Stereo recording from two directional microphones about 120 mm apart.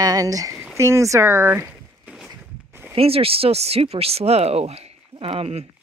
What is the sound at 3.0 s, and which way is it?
Speech, 55° right (ahead or behind).